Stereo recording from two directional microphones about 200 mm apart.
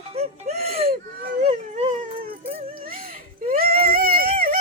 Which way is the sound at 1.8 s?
40° right (ahead or behind).